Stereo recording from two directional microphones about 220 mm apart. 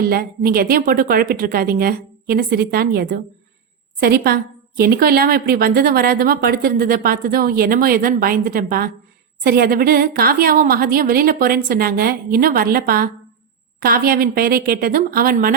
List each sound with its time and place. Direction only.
0.0 s a woman's voice: 40° right (ahead or behind)